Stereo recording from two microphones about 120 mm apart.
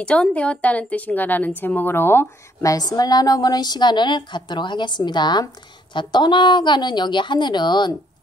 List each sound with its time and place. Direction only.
0.0 s a woman's voice: 10° left (ahead or behind); by 7.9 s 40° left (ahead or behind)